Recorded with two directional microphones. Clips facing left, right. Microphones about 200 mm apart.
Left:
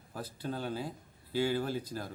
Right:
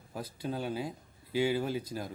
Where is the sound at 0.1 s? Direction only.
10° right (ahead or behind).